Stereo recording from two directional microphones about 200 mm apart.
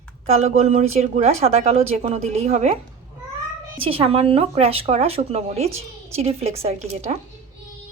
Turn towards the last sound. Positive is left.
turn(degrees=-30)  # may be behind; listen again after turning